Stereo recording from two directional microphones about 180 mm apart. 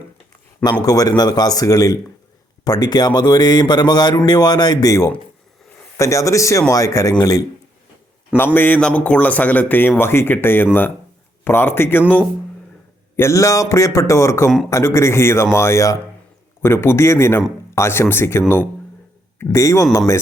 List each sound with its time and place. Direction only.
0.6 s a man's voice: 20° left (ahead or behind)
8.5 s speech: 10° left (ahead or behind)